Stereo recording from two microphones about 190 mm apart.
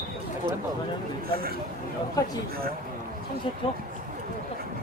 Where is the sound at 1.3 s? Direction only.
50° right (ahead or behind).